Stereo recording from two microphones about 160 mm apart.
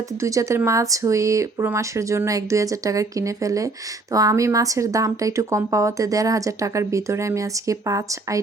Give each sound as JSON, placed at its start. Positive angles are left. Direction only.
{"t": 0.2, "sound": "a woman's voice", "side_deg": -20}